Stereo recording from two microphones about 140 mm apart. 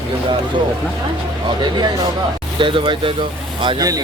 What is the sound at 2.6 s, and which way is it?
A man's voice, 35° right (ahead or behind).